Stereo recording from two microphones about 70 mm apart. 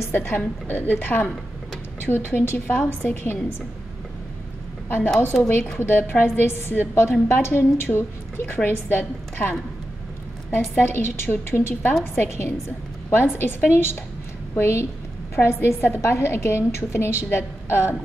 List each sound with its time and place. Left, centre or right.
0.1 s a woman's voice: left
4.8 s a woman's voice: left
5.3 s a woman's voice: centre
5.8 s a woman's voice: left
10.7 s a woman's voice: left